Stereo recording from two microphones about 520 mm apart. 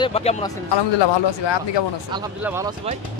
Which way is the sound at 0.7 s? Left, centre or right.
Left.